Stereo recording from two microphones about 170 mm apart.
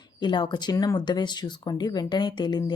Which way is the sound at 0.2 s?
25° left (ahead or behind).